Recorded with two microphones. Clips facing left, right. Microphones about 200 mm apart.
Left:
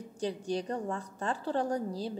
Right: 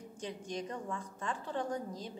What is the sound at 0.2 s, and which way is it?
A woman's voice, 35° left (ahead or behind).